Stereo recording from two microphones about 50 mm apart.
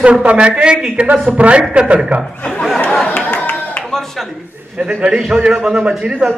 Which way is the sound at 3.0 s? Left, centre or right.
Left.